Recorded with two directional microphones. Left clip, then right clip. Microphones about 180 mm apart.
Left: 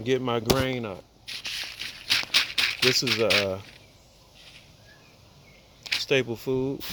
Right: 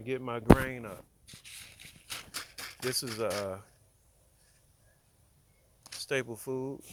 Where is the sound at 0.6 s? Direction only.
15° left (ahead or behind).